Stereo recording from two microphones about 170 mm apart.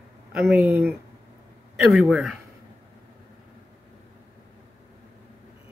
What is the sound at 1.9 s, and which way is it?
Speech, centre (ahead or behind).